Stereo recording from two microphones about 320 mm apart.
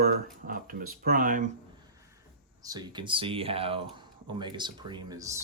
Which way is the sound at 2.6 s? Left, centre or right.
Centre.